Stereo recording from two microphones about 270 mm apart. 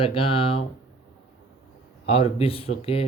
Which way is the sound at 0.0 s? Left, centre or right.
Centre.